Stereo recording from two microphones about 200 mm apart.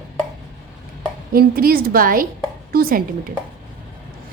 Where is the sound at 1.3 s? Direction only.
50° right (ahead or behind).